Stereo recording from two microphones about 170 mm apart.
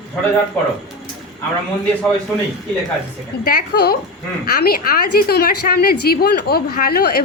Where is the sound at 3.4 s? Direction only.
60° left (ahead or behind).